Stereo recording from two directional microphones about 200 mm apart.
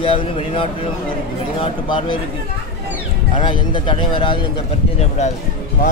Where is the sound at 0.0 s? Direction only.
25° left (ahead or behind).